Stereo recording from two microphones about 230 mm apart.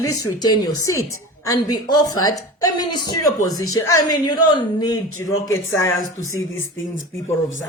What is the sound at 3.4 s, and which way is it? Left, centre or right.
Speech, centre.